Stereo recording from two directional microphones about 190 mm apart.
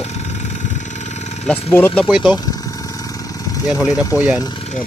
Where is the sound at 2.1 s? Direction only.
5° right (ahead or behind).